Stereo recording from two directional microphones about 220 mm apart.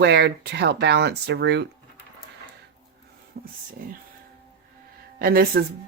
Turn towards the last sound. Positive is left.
turn(degrees=-45)  # may be behind; listen again after turning